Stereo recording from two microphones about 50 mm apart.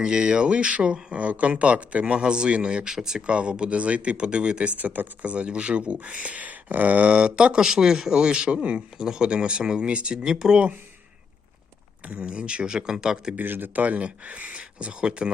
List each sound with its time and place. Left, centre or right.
0.0 s speech: centre
12.0 s speech: right
13.3 s speech: right; by 15.3 s centre